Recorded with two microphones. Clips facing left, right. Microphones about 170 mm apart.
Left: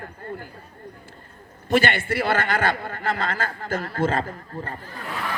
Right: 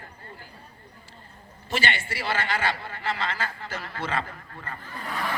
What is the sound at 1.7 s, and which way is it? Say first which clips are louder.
A man's voice: left 8 dB; 55° left (ahead or behind).